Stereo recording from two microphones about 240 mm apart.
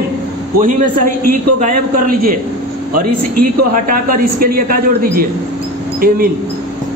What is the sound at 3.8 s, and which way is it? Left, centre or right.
A man's voice, right.